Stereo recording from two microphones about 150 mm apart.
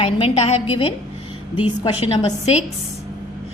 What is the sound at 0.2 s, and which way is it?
Speech, 40° left (ahead or behind).